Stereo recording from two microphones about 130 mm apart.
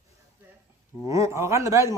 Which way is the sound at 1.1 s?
25° right (ahead or behind).